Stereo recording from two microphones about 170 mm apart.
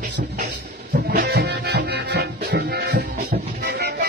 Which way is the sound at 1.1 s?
70° right (ahead or behind).